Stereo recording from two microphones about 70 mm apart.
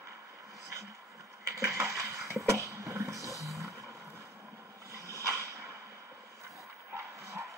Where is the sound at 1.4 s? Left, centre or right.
Right.